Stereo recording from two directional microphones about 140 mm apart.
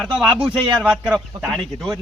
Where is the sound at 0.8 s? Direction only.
10° right (ahead or behind).